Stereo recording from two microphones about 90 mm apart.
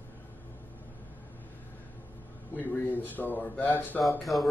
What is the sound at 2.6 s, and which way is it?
Speech, 20° left (ahead or behind).